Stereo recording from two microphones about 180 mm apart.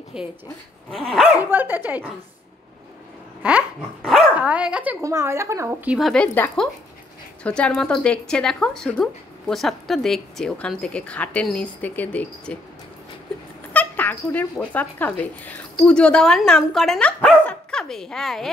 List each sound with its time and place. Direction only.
0.1 s a woman's voice: 5° right (ahead or behind)
3.4 s speech: 5° right (ahead or behind)
5.9 s a woman's voice: 5° left (ahead or behind)
13.7 s a woman's voice: 10° left (ahead or behind)